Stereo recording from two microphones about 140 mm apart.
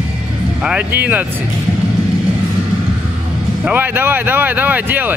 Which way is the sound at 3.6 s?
15° right (ahead or behind).